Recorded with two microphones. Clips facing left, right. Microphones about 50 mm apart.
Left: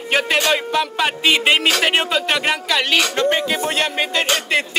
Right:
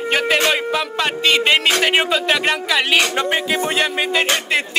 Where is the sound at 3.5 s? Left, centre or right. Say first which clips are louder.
Right 2 dB; centre.